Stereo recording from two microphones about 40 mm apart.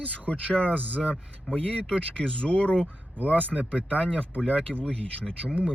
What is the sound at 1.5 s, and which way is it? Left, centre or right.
Speech, left.